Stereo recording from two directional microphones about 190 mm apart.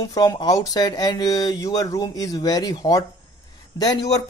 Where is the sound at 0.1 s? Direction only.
20° left (ahead or behind).